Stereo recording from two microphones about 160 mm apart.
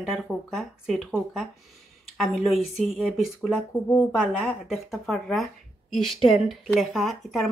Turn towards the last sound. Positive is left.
turn(degrees=0)  # may be behind; listen again after turning